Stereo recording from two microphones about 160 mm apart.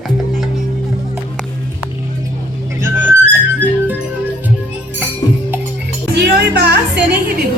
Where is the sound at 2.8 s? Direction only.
15° right (ahead or behind).